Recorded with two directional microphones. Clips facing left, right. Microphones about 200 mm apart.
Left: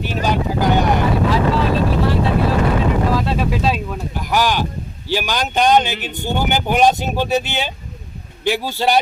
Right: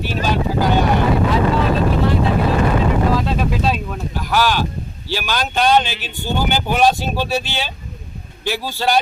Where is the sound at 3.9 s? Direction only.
15° left (ahead or behind).